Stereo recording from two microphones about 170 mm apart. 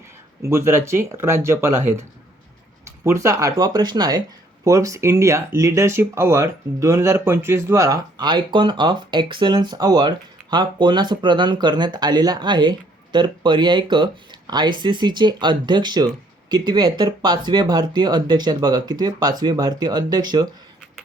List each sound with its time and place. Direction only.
0.4 s speech: 15° right (ahead or behind)
3.0 s speech: 20° right (ahead or behind)